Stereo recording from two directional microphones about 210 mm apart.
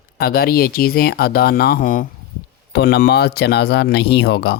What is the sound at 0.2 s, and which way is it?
Speech, 45° left (ahead or behind).